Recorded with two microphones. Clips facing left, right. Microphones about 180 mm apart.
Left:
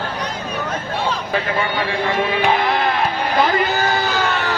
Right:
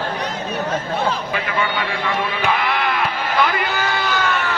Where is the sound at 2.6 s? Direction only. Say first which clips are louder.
Left 3 dB; 40° left (ahead or behind).